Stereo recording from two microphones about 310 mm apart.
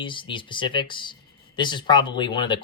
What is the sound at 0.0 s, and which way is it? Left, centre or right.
Speech, centre.